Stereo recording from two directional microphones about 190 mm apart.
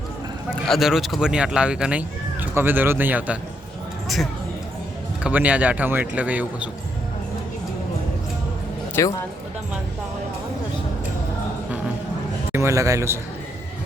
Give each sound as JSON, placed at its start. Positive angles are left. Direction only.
{"t": 0.7, "sound": "speech", "side_deg": 0}
{"t": 5.2, "sound": "speech", "side_deg": -10}
{"t": 9.0, "sound": "speech", "side_deg": 15}
{"t": 12.5, "sound": "a man's voice", "side_deg": -15}